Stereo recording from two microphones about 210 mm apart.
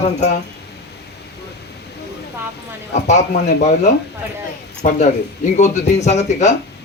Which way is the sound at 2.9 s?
30° left (ahead or behind).